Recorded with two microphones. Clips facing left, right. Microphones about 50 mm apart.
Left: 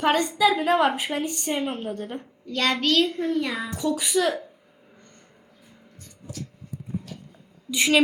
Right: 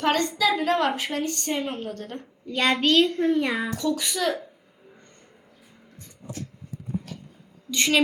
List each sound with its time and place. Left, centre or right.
0.0 s a woman's voice: centre
2.5 s a woman's voice: centre
3.8 s a woman's voice: centre
6.0 s a sound: right
7.7 s a woman's voice: centre